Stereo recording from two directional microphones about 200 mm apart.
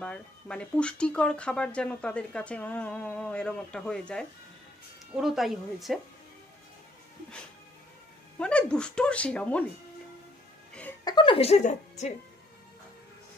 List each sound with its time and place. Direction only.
0.0 s speech: 5° left (ahead or behind)
8.4 s speech: 5° left (ahead or behind)
10.7 s music: 5° left (ahead or behind)
11.1 s a woman's voice: 25° left (ahead or behind)